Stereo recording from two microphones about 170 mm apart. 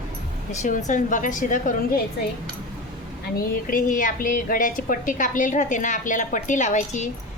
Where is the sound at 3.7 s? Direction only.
50° left (ahead or behind).